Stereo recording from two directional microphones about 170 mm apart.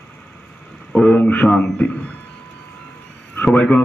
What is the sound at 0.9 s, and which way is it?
Speech, 10° left (ahead or behind).